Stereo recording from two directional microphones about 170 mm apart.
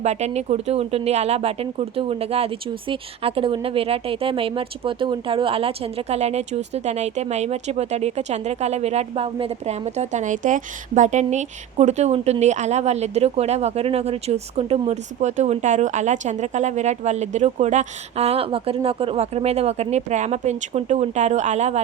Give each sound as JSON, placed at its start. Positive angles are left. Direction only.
{"t": 0.0, "sound": "a woman's voice", "side_deg": -40}